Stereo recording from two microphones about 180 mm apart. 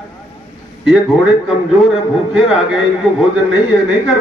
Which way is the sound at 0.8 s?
5° right (ahead or behind).